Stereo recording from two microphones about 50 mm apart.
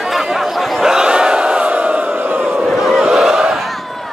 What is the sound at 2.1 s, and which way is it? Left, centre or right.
Crowd, right.